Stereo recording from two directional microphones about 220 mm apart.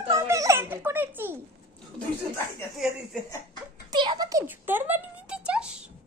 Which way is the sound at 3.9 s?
20° right (ahead or behind).